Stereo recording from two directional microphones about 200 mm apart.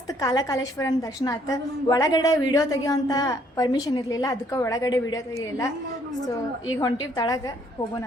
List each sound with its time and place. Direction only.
0.1 s a woman's voice: 20° left (ahead or behind)
6.7 s a woman's voice: 20° left (ahead or behind)